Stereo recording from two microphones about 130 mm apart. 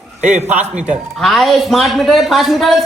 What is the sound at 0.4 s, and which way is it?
Speech, 10° right (ahead or behind).